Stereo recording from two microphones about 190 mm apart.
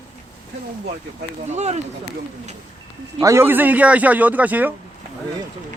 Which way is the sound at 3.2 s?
15° right (ahead or behind).